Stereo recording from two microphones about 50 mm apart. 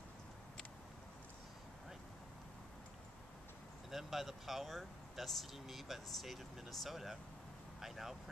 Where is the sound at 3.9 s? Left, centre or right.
Centre.